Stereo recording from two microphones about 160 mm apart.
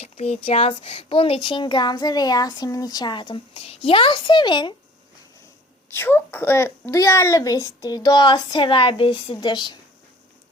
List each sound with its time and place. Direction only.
0.0 s a child's voice: 40° left (ahead or behind)
5.9 s a child's voice: 15° left (ahead or behind)